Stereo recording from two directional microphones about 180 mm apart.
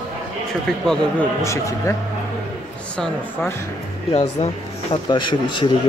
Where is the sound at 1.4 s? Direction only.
15° left (ahead or behind).